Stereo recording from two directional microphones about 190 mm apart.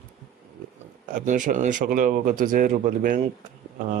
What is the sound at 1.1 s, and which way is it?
Speech, 45° right (ahead or behind).